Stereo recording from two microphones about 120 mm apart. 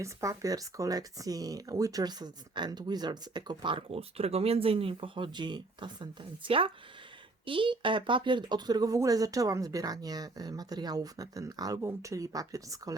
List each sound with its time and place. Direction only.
0.0 s speech: 25° right (ahead or behind)